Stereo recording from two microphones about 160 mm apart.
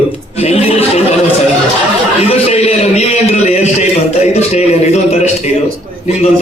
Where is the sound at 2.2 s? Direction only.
40° left (ahead or behind).